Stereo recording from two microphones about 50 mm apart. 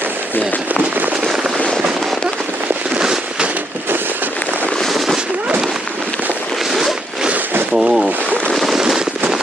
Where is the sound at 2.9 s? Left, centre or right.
Centre.